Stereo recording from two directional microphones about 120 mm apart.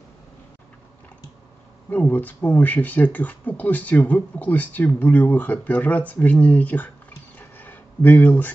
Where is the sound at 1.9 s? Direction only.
15° left (ahead or behind).